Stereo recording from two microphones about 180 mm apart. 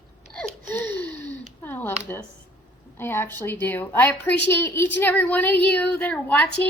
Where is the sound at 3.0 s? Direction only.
10° left (ahead or behind).